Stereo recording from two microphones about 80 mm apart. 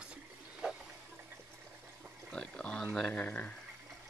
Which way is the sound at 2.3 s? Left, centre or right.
Centre.